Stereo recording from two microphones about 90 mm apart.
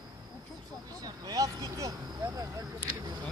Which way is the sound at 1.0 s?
45° right (ahead or behind).